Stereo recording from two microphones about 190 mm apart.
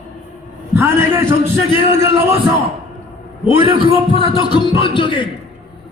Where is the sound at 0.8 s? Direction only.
15° right (ahead or behind).